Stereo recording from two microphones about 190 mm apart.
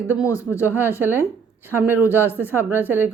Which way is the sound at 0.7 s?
10° right (ahead or behind).